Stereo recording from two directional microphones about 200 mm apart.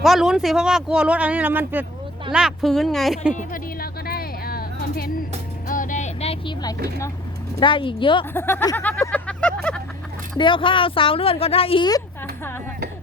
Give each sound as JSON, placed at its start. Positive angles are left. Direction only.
{"t": 0.0, "sound": "speech", "side_deg": 0}
{"t": 3.3, "sound": "a sound", "side_deg": 45}
{"t": 5.6, "sound": "vehicle", "side_deg": 40}
{"t": 7.6, "sound": "speech", "side_deg": 25}
{"t": 8.2, "sound": "vehicle", "side_deg": 10}
{"t": 10.3, "sound": "speech", "side_deg": 25}